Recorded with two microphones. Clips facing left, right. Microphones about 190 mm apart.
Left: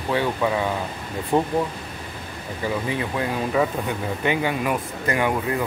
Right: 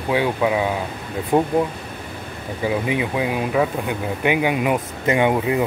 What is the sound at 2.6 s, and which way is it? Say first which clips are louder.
Speech: right 4 dB; 15° right (ahead or behind).